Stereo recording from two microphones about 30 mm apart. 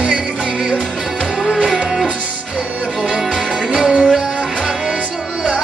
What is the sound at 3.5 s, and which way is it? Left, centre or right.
Music, right.